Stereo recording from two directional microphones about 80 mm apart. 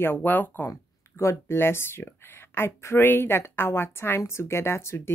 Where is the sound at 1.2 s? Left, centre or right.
Left.